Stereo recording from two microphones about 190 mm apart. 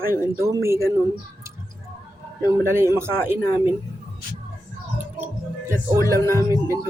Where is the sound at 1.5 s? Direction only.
15° right (ahead or behind).